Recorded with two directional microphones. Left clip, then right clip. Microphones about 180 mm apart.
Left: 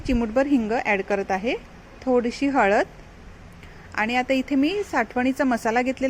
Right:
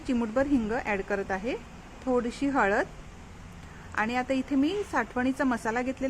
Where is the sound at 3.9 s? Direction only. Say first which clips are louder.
Left 6 dB; 20° left (ahead or behind).